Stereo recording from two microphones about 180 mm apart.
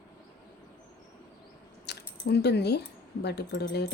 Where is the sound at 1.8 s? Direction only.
65° left (ahead or behind).